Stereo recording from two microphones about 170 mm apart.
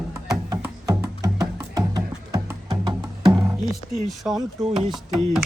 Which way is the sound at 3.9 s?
Centre (ahead or behind).